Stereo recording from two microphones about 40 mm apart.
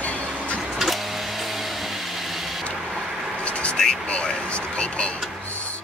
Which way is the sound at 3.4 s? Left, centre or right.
Left.